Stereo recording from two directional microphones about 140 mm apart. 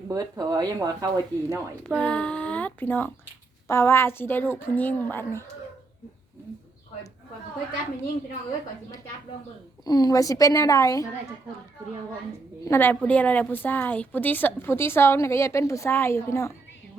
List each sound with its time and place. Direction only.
0.1 s speech: 30° right (ahead or behind)
2.0 s a woman's voice: 10° left (ahead or behind)
9.8 s a woman's voice: 25° left (ahead or behind)
12.6 s a woman's voice: 15° left (ahead or behind)